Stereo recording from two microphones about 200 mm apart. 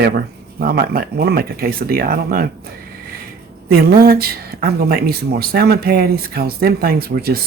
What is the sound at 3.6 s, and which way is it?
Speech, 50° right (ahead or behind).